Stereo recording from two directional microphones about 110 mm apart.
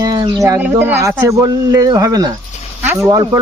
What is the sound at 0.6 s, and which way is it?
Speech, 20° right (ahead or behind).